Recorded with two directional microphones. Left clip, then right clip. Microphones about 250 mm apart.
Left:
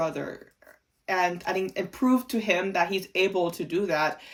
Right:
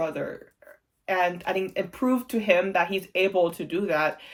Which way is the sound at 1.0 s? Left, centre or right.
Centre.